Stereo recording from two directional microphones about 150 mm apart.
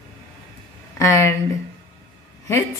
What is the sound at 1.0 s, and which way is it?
Speech, 20° left (ahead or behind).